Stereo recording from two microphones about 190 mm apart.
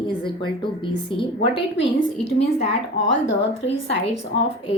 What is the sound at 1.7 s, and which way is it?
Speech, 70° left (ahead or behind).